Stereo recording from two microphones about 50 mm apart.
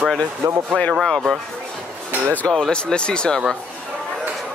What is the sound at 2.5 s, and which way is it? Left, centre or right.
Speech, centre.